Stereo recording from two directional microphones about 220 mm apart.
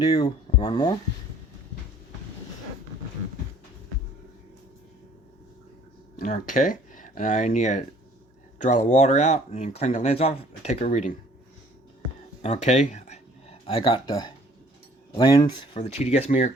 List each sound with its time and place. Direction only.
0.0 s speech: 25° left (ahead or behind)
6.1 s speech: 35° left (ahead or behind)
12.4 s speech: 30° left (ahead or behind)